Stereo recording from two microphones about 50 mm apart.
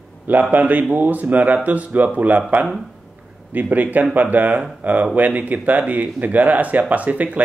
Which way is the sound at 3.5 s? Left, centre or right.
Right.